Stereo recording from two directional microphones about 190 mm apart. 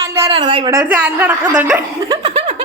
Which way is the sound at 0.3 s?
25° right (ahead or behind).